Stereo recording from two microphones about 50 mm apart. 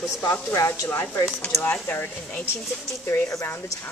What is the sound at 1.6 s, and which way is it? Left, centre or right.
Speech, left.